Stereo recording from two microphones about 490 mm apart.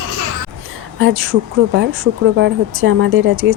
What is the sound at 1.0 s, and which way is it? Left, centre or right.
Speech, right.